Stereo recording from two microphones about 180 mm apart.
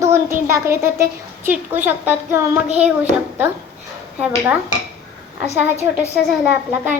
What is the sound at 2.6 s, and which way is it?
Speech, 35° right (ahead or behind).